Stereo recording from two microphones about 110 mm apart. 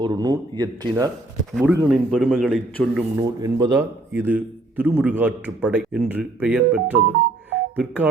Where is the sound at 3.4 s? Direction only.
35° right (ahead or behind).